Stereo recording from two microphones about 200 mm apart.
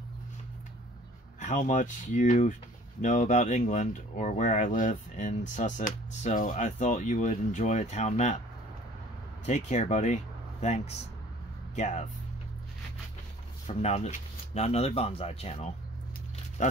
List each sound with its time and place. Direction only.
1.4 s speech: 40° left (ahead or behind)
9.5 s speech: 35° left (ahead or behind)
13.7 s speech: 35° left (ahead or behind)